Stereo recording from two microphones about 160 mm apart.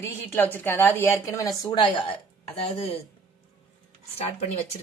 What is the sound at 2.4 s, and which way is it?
Speech, 35° left (ahead or behind).